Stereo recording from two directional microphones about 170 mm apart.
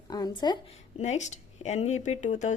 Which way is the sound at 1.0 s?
45° left (ahead or behind).